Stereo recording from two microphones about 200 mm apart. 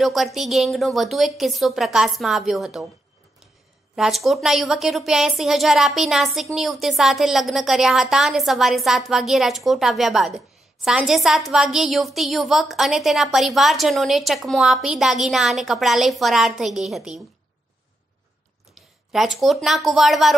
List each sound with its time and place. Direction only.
0.0 s a woman's voice: centre (ahead or behind)
3.9 s a woman's voice: centre (ahead or behind)
19.1 s a woman's voice: centre (ahead or behind)